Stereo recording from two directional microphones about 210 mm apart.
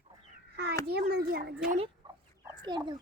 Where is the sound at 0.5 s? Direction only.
50° right (ahead or behind).